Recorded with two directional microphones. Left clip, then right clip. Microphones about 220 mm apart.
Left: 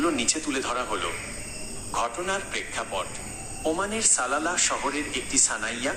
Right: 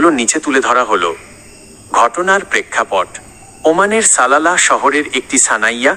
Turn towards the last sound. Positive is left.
turn(degrees=-40)  # may be behind; listen again after turning